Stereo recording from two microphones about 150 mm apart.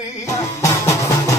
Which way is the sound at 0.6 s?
20° left (ahead or behind).